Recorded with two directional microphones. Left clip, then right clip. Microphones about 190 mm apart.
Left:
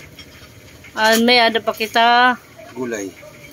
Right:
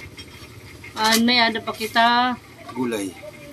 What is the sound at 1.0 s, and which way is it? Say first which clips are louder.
Speech: left 5 dB; 40° left (ahead or behind).